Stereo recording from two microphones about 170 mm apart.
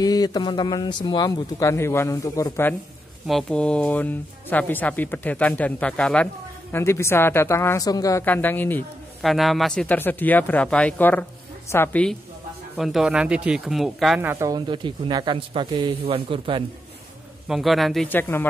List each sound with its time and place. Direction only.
0.0 s a man's voice: 20° left (ahead or behind)
3.3 s speech: 5° left (ahead or behind)
9.2 s speech: centre (ahead or behind)
14.2 s speech: 15° right (ahead or behind)
14.7 s a man's voice: 25° right (ahead or behind)
17.5 s speech: centre (ahead or behind)